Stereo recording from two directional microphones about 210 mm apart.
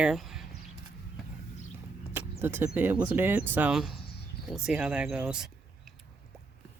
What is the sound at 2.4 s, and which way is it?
Speech, 10° right (ahead or behind).